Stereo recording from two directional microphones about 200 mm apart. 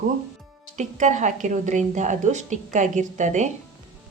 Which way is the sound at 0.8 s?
35° right (ahead or behind).